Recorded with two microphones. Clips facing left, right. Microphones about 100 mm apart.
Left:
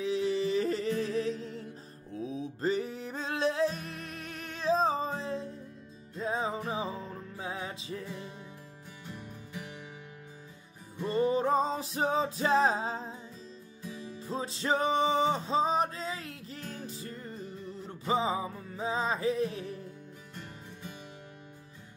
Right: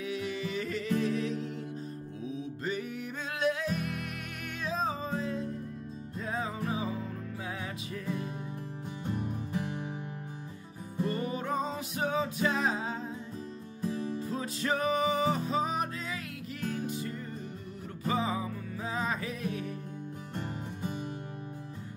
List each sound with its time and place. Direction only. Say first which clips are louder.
0.0 s music: left 5 dB; 30° left (ahead or behind)
9.2 s music: right 9 dB; 45° right (ahead or behind)
11.1 s music: left 8 dB; 30° left (ahead or behind)
14.2 s music: even; 25° left (ahead or behind)
18.0 s music: left 2 dB; 20° left (ahead or behind)
20.3 s music: right 9 dB; 45° right (ahead or behind)